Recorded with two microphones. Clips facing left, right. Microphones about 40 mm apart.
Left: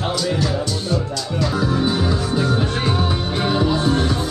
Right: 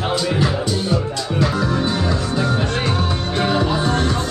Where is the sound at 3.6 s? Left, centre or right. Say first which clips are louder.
Left 1 dB; centre.